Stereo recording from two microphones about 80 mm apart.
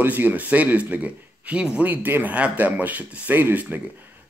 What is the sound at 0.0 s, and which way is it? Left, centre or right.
Speech, right.